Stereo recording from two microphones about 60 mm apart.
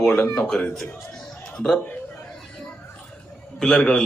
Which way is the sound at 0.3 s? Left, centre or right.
Centre.